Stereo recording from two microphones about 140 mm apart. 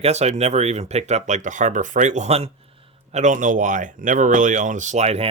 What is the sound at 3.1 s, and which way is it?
Speech, 60° right (ahead or behind).